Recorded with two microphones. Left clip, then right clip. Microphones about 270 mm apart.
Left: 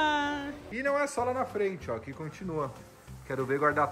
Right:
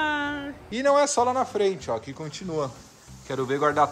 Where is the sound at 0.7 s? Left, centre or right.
Centre.